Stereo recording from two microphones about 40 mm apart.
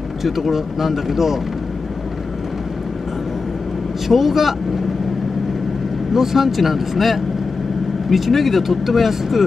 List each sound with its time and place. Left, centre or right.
0.2 s speech: centre
4.1 s speech: centre
6.1 s speech: centre